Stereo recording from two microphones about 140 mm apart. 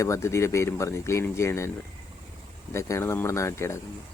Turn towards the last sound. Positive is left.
turn(degrees=20)  # may be behind; listen again after turning